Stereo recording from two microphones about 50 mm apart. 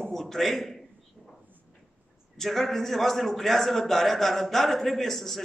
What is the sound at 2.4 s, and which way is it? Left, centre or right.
A man's voice, centre.